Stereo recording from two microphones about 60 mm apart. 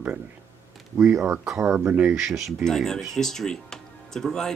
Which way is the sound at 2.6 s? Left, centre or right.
Centre.